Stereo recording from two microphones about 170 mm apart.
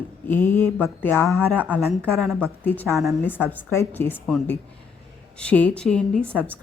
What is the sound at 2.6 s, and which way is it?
Speech, 10° left (ahead or behind).